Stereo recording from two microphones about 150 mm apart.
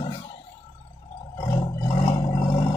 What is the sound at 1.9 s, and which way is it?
Vehicle, 35° left (ahead or behind).